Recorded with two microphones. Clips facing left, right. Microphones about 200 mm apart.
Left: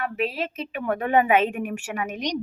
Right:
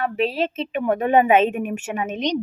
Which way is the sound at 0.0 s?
30° right (ahead or behind).